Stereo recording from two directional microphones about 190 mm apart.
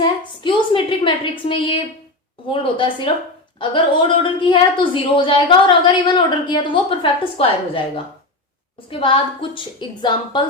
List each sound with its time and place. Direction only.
0.0 s a woman's voice: 25° left (ahead or behind)
8.9 s a woman's voice: 25° left (ahead or behind)